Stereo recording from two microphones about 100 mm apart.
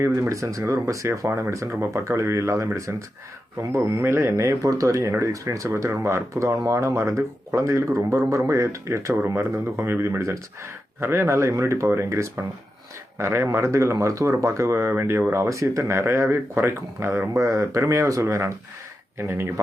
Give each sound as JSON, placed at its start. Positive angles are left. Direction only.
{"t": 0.0, "sound": "speech", "side_deg": -30}